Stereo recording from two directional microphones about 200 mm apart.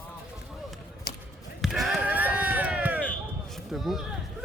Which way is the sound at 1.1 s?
50° left (ahead or behind).